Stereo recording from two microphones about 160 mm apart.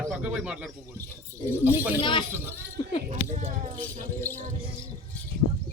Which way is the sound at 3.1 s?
45° right (ahead or behind).